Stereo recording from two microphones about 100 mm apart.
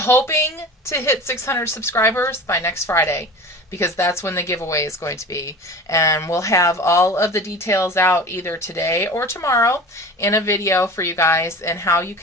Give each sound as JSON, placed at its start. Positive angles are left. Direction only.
{"t": 0.0, "sound": "speech", "side_deg": 25}